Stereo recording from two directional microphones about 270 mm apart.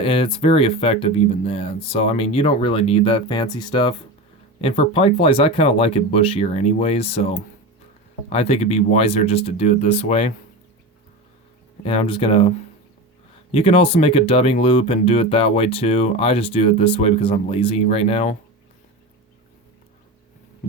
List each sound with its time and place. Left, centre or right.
0.0 s speech: centre
11.9 s speech: centre
13.5 s speech: left